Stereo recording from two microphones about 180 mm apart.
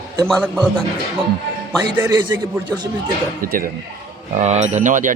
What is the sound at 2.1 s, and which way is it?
Speech, 25° right (ahead or behind).